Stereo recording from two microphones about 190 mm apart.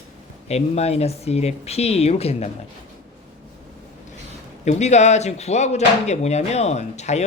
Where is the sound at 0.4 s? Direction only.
35° left (ahead or behind).